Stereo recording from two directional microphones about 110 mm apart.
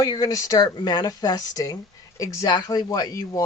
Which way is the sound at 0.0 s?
35° left (ahead or behind).